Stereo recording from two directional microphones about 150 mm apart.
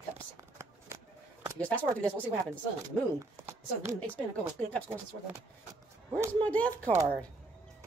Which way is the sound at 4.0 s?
10° left (ahead or behind).